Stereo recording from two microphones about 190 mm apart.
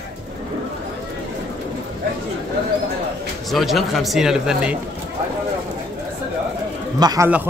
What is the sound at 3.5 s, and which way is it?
A man's voice, centre (ahead or behind).